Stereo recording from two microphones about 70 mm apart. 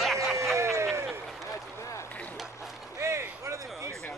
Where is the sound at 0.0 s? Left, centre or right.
Centre.